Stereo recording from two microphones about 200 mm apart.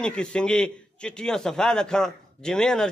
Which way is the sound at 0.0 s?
5° left (ahead or behind).